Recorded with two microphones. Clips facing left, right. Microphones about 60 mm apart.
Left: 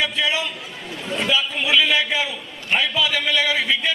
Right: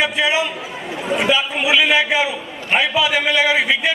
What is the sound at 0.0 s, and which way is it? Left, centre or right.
A man's voice, centre.